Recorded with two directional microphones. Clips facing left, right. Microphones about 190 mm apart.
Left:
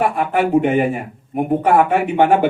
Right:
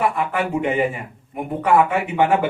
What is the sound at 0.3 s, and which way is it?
Speech, 50° left (ahead or behind).